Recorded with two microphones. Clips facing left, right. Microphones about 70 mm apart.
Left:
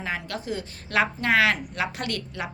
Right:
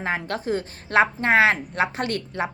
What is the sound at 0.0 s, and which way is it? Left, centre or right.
A woman's voice, right.